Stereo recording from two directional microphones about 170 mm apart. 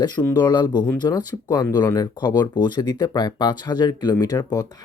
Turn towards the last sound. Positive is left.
turn(degrees=20)  # may be behind; listen again after turning